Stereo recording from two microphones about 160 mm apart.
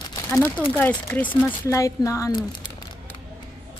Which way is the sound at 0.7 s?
10° left (ahead or behind).